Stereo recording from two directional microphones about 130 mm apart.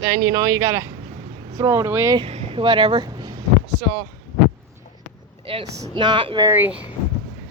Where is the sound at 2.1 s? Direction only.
50° right (ahead or behind); by 3.3 s 35° right (ahead or behind).